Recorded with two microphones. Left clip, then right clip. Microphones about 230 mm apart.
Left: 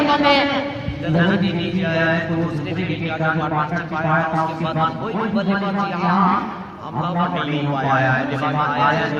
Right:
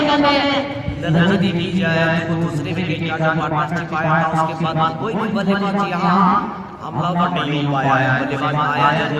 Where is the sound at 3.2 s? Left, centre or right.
Right.